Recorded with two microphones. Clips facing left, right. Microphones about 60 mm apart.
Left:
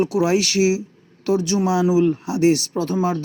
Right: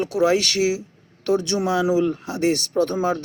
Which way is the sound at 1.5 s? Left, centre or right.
Centre.